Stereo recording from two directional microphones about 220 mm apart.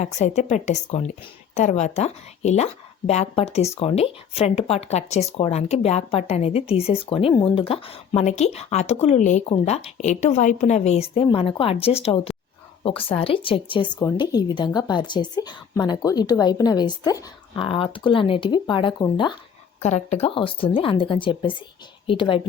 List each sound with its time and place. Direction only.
0.0 s a woman's voice: 30° left (ahead or behind)
19.8 s a woman's voice: 30° left (ahead or behind)